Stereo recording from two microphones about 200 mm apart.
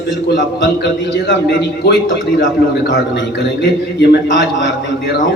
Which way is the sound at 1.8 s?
60° left (ahead or behind).